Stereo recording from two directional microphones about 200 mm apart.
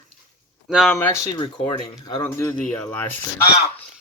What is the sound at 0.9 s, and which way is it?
Speech, 10° left (ahead or behind).